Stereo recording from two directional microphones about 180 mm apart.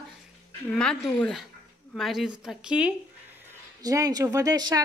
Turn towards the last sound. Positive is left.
turn(degrees=-20)  # may be behind; listen again after turning